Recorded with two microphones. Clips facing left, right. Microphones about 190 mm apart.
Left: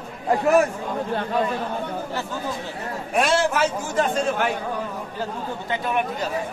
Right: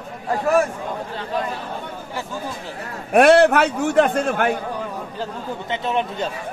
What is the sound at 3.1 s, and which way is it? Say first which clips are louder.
A man's voice: right 9 dB; 60° right (ahead or behind).